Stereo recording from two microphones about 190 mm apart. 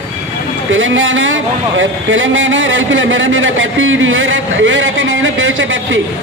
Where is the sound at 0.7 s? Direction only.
90° right.